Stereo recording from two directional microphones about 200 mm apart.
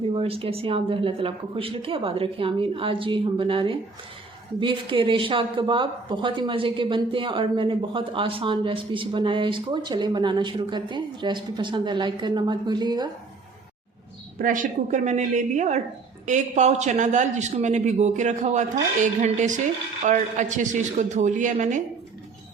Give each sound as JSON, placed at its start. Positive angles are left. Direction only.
{"t": 0.1, "sound": "a woman's voice", "side_deg": -30}
{"t": 14.3, "sound": "a man's voice", "side_deg": -40}